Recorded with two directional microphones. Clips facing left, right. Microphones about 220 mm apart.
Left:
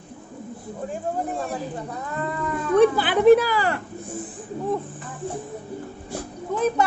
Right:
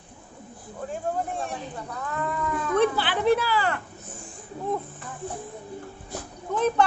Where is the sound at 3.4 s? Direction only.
40° left (ahead or behind).